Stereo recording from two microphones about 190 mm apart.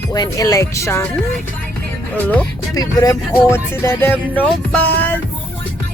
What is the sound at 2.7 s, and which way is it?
Speech, 20° left (ahead or behind).